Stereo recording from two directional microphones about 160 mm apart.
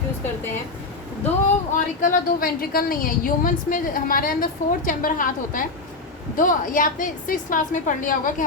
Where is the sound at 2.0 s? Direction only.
65° left (ahead or behind).